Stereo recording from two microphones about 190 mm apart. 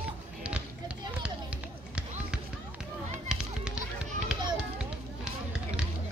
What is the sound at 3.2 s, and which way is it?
Music, 5° right (ahead or behind).